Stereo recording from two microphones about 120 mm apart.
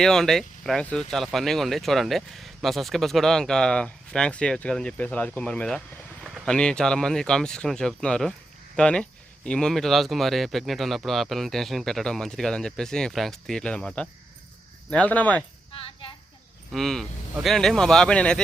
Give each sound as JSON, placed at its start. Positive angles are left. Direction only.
{"t": 0.0, "sound": "speech", "side_deg": 5}
{"t": 15.7, "sound": "a sound", "side_deg": 45}
{"t": 16.7, "sound": "speech", "side_deg": 0}